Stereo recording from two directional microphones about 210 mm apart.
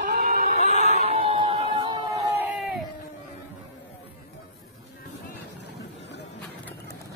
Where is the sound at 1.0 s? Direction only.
25° right (ahead or behind).